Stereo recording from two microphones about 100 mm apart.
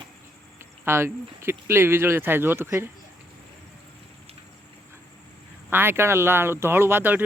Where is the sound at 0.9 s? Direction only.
25° right (ahead or behind).